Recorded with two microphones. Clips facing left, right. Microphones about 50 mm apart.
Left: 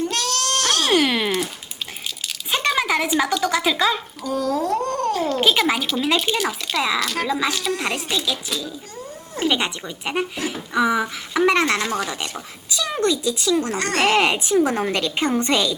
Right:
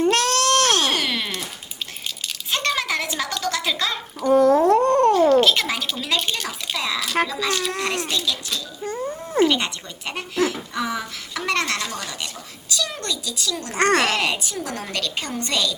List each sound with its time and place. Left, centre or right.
0.0 s a sound: right
0.9 s a sound: centre
2.5 s speech: centre
4.2 s speech: right
5.4 s a woman's voice: centre
13.7 s speech: right
14.0 s a woman's voice: left